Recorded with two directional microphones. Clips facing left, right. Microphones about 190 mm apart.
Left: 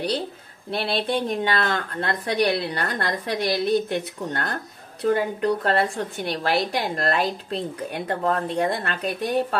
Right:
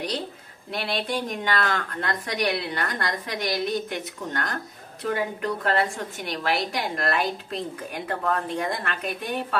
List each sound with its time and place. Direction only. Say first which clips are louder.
0.7 s a woman's voice: left 4 dB; 30° left (ahead or behind)